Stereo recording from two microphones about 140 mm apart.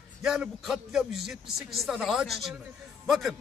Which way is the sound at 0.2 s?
5° right (ahead or behind).